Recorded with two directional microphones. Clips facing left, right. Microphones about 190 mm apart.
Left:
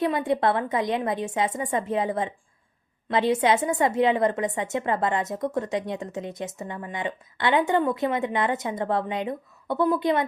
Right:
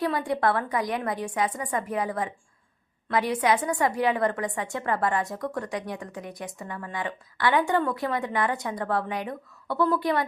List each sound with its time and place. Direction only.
0.0 s a woman's voice: 20° left (ahead or behind)